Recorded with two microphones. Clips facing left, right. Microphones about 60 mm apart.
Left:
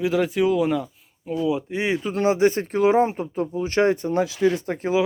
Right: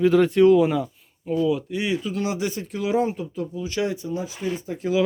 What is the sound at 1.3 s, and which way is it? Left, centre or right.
Speech, centre.